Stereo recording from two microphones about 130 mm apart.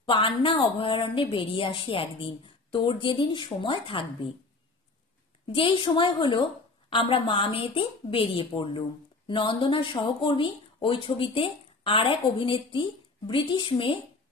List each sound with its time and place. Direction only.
0.0 s a woman's voice: 40° left (ahead or behind)
5.5 s a woman's voice: 40° left (ahead or behind)